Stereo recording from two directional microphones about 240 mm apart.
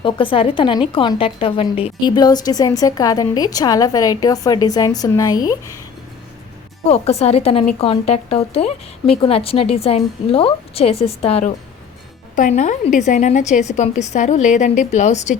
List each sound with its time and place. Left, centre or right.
0.0 s a woman's voice: left
6.8 s speech: left